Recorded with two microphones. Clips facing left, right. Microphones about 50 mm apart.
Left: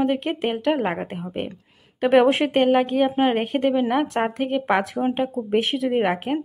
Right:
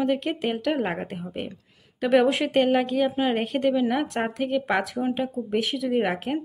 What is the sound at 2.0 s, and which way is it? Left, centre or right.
Speech, left.